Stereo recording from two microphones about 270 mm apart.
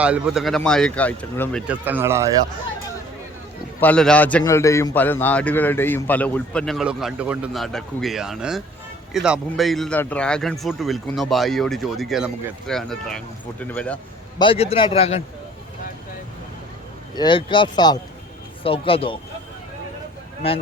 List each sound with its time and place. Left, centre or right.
0.0 s a man's voice: centre
3.8 s a man's voice: centre
14.3 s a man's voice: centre
17.2 s a man's voice: centre
20.4 s a man's voice: left